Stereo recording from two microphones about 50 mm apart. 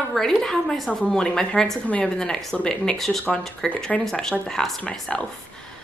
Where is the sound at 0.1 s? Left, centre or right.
Centre.